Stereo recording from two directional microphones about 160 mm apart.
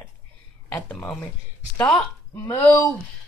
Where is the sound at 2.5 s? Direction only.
20° left (ahead or behind).